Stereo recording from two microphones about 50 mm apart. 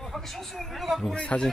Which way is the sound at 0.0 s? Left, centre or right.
Centre.